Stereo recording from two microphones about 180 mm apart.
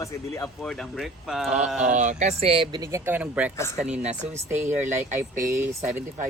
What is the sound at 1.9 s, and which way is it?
Speech, 40° right (ahead or behind).